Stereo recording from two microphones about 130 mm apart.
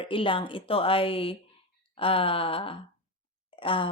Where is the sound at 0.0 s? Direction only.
40° left (ahead or behind).